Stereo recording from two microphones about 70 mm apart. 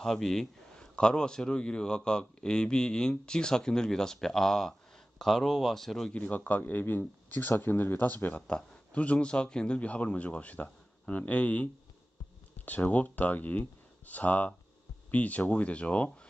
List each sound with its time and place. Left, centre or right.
0.0 s speech: centre
6.1 s speech: left
8.4 s speech: centre